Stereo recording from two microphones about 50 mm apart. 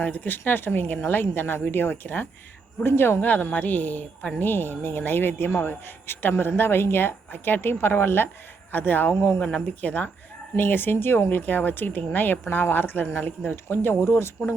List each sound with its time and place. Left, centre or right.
0.0 s speech: left
2.8 s speech: left
3.2 s speech: left
4.4 s speech: left
9.4 s speech: left
10.6 s speech: left